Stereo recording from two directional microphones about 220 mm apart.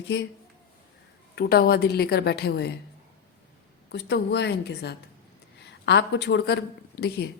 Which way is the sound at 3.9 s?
50° left (ahead or behind).